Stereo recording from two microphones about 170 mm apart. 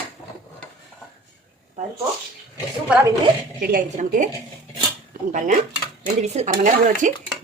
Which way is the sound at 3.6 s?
55° right (ahead or behind).